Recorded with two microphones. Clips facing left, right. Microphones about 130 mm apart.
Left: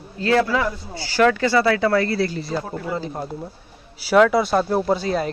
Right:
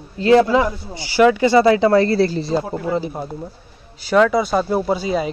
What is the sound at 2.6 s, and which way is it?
Speech, 15° right (ahead or behind).